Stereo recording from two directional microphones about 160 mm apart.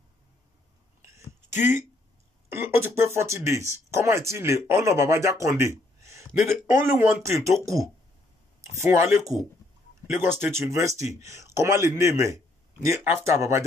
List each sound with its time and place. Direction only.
1.6 s speech: 15° right (ahead or behind)